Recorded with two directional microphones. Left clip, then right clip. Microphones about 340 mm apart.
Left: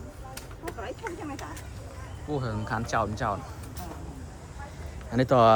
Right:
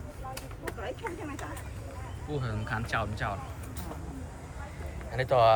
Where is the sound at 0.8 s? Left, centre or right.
Left.